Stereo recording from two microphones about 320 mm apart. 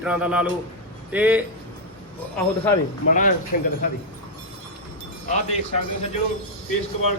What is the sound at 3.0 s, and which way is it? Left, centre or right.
Speech, left.